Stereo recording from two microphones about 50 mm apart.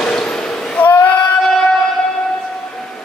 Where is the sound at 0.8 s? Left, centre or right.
Left.